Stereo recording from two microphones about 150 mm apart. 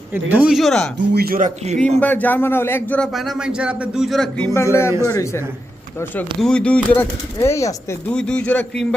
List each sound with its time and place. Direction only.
0.1 s speech: 10° right (ahead or behind)
1.1 s speech: 80° right; by 1.8 s 55° right (ahead or behind)
2.0 s speech: 10° left (ahead or behind)
3.1 s speech: centre (ahead or behind)
4.4 s a man's voice: 20° left (ahead or behind)
6.4 s speech: 5° left (ahead or behind)
8.1 s speech: 5° left (ahead or behind)